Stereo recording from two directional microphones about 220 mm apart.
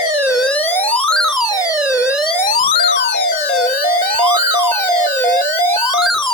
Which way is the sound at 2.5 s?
25° left (ahead or behind).